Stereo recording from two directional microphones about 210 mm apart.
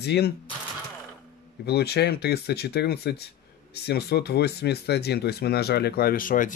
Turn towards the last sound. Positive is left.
turn(degrees=40)  # may be behind; listen again after turning